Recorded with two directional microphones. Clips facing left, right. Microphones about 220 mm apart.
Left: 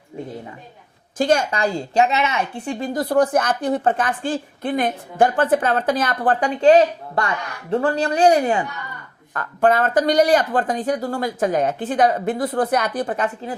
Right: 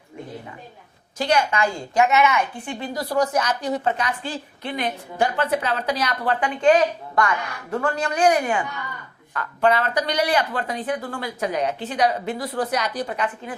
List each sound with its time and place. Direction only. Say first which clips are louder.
1.2 s a woman's voice: left 3 dB; 45° left (ahead or behind)
9.3 s a woman's voice: left 3 dB; 45° left (ahead or behind)